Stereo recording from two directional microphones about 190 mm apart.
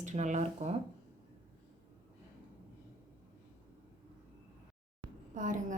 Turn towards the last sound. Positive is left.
turn(degrees=-45)  # may be behind; listen again after turning